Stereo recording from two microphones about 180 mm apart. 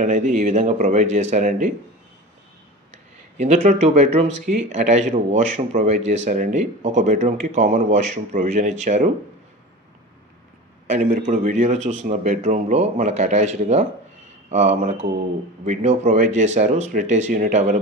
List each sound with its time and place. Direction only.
0.0 s speech: 45° right (ahead or behind)
3.3 s speech: 40° right (ahead or behind)
10.9 s speech: 40° right (ahead or behind)